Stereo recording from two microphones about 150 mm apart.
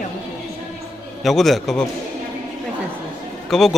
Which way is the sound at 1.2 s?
Centre (ahead or behind).